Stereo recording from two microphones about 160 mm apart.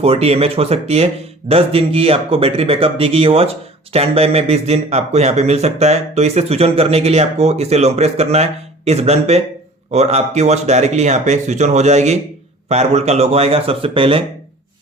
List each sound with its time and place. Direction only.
0.0 s a man's voice: 40° right (ahead or behind)